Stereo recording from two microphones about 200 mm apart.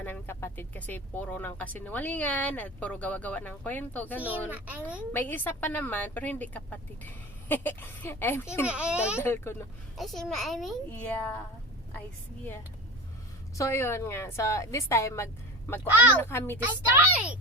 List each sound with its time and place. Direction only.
0.0 s speech: 10° left (ahead or behind)
4.4 s a child's voice: 10° right (ahead or behind)
5.1 s speech: 10° left (ahead or behind)
8.6 s a child's voice: 5° right (ahead or behind)
9.2 s speech: 10° left (ahead or behind)
10.0 s a child's voice: centre (ahead or behind)
13.6 s speech: 15° left (ahead or behind)